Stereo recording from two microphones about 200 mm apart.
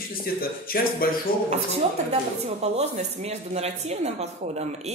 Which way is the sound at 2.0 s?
35° right (ahead or behind).